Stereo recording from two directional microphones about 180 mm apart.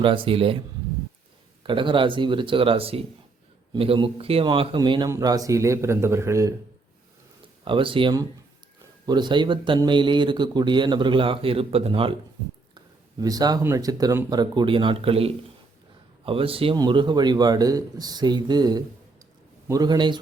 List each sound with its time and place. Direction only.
0.0 s speech: 30° right (ahead or behind)
1.6 s speech: 25° right (ahead or behind)
7.6 s speech: 30° right (ahead or behind)
12.7 s speech: 20° right (ahead or behind)